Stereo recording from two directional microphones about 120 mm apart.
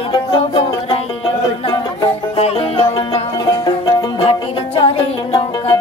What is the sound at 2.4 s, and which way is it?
Music, 55° left (ahead or behind).